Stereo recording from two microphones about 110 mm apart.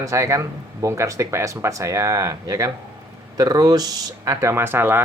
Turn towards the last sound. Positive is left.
turn(degrees=-20)  # may be behind; listen again after turning